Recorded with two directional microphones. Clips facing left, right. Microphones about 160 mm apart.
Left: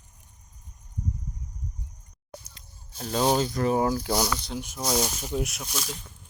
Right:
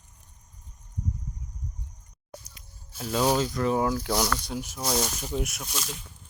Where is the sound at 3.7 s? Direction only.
5° left (ahead or behind).